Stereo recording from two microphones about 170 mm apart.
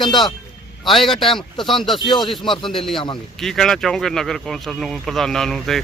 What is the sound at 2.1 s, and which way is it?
Speech, 25° left (ahead or behind).